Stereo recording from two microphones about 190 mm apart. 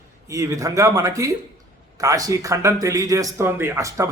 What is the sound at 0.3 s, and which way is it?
A man's voice, 15° right (ahead or behind).